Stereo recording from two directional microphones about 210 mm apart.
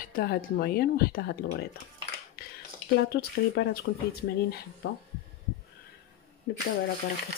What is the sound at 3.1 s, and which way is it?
Speech, 45° left (ahead or behind).